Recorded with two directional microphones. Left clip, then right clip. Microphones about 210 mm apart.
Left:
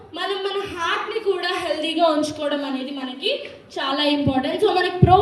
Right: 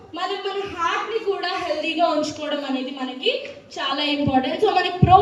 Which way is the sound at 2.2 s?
60° left (ahead or behind).